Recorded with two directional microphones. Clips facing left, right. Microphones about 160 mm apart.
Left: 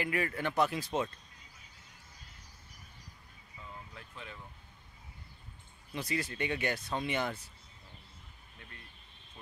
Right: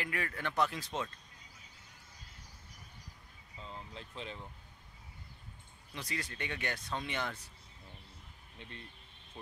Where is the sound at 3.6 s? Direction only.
25° right (ahead or behind).